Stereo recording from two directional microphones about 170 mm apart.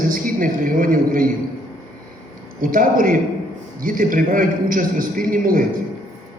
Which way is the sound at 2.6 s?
55° right (ahead or behind).